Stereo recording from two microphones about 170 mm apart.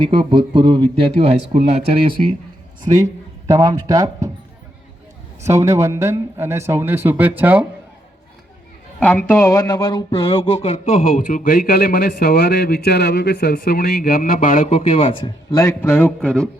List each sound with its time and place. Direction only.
0.0 s speech: 30° right (ahead or behind)
2.8 s speech: 20° right (ahead or behind)
5.4 s a man's voice: 15° right (ahead or behind)
9.0 s speech: 10° left (ahead or behind); by 15.3 s 35° left (ahead or behind)
15.5 s speech: 15° left (ahead or behind)